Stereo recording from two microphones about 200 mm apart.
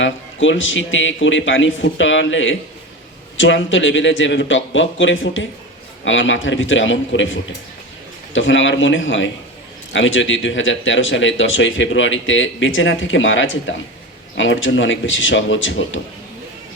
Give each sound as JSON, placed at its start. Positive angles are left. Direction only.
{"t": 0.0, "sound": "speech", "side_deg": 70}